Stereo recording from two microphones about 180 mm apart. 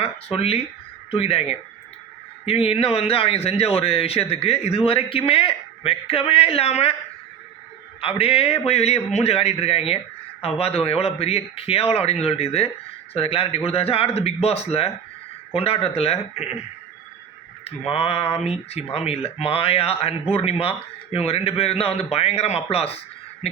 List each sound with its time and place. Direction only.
0.0 s a man's voice: 35° left (ahead or behind)
8.0 s a man's voice: 30° left (ahead or behind)
17.7 s a man's voice: 35° left (ahead or behind)